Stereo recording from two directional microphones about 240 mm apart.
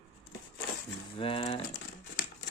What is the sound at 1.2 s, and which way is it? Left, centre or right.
Speech, left.